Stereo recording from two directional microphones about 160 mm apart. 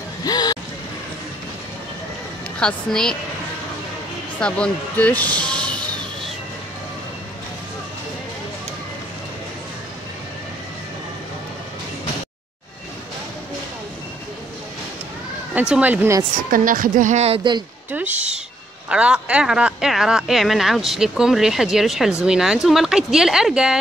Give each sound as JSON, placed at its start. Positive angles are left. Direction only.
{"t": 0.2, "sound": "basketball bounce", "side_deg": 25}
{"t": 2.6, "sound": "speech", "side_deg": 5}
{"t": 4.4, "sound": "speech", "side_deg": 5}
{"t": 15.7, "sound": "speech", "side_deg": -10}
{"t": 16.4, "sound": "speech", "side_deg": -60}
{"t": 17.9, "sound": "speech", "side_deg": -10}